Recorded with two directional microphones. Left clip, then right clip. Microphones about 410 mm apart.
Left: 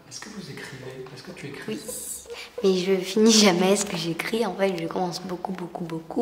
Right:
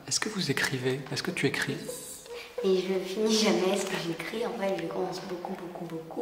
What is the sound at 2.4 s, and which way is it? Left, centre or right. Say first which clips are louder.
A woman's voice: left 4 dB; left.